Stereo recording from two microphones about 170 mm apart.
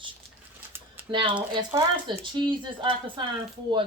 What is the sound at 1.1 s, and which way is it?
Speech, 30° right (ahead or behind).